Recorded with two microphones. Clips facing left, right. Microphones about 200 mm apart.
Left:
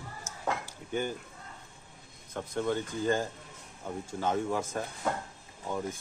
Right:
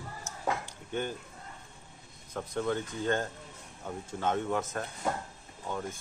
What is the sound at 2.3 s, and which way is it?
Speech, centre (ahead or behind).